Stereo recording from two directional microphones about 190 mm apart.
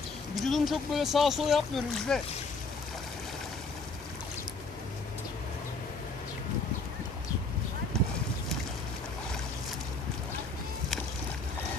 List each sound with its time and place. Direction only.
0.3 s speech: centre (ahead or behind)
7.9 s boat: centre (ahead or behind)